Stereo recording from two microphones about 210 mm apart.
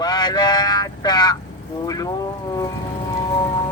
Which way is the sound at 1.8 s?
20° left (ahead or behind).